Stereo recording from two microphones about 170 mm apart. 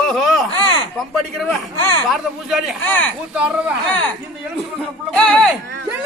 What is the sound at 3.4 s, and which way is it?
Speech, 5° right (ahead or behind).